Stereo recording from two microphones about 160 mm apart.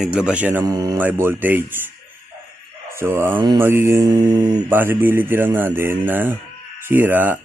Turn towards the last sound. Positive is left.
turn(degrees=-10)  # may be behind; listen again after turning